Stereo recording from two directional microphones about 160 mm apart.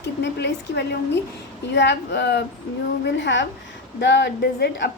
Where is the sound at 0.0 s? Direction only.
90° left.